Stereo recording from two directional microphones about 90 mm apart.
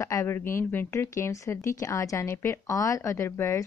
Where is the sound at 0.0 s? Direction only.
35° left (ahead or behind).